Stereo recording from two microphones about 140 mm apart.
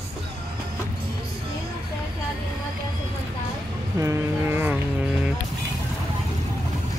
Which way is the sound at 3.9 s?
20° right (ahead or behind).